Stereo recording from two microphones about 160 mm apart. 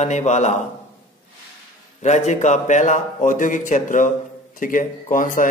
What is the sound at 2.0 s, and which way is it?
A man's voice, 45° left (ahead or behind).